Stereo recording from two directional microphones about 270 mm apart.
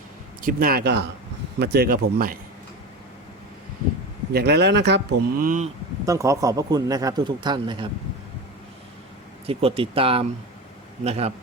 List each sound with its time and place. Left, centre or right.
0.4 s speech: right
4.3 s speech: right
6.1 s speech: centre
9.5 s speech: right